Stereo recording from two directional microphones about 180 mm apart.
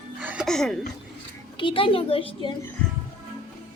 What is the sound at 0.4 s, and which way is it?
Speech, 5° left (ahead or behind).